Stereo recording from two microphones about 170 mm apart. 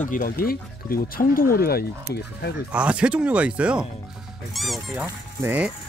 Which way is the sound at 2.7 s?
5° right (ahead or behind).